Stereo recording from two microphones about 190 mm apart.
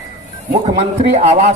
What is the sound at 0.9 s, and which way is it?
Speech, 35° right (ahead or behind).